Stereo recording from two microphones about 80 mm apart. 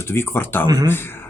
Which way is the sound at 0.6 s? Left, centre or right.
Right.